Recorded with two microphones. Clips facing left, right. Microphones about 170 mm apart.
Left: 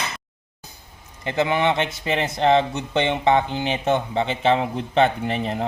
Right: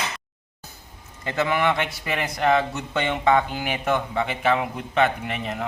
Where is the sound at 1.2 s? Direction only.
20° left (ahead or behind).